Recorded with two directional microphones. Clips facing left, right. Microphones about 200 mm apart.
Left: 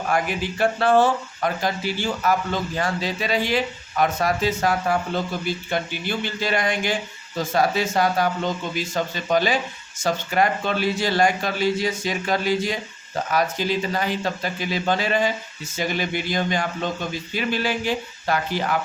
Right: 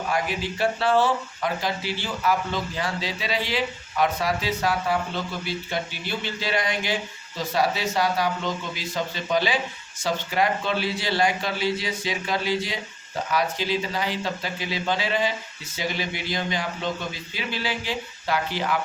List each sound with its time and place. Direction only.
0.1 s speech: 50° left (ahead or behind)